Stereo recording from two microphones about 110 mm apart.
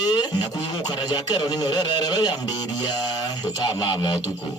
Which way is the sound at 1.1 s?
40° left (ahead or behind).